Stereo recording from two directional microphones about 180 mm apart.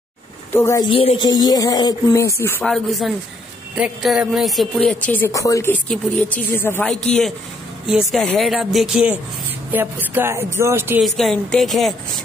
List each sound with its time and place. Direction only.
0.5 s speech: 15° left (ahead or behind)
0.9 s speech: 30° left (ahead or behind)
2.6 s speech: centre (ahead or behind)
11.0 s speech: centre (ahead or behind)